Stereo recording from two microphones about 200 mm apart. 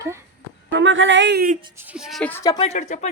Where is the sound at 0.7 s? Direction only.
70° right (ahead or behind).